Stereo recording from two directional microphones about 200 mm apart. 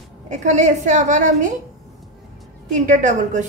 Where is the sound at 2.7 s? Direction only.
40° right (ahead or behind).